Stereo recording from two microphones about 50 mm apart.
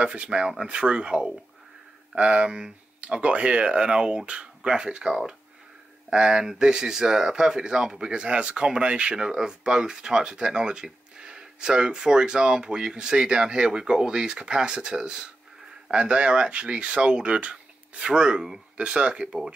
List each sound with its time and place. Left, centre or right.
0.0 s speech: right